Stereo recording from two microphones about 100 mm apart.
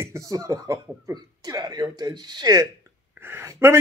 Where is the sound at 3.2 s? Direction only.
25° right (ahead or behind).